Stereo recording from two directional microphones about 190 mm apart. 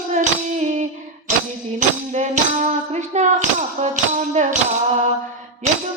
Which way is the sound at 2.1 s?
40° right (ahead or behind).